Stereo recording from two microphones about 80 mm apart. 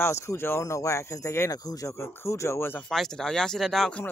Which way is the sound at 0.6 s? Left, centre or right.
Left.